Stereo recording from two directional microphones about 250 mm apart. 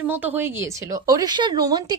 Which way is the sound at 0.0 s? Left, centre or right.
Centre.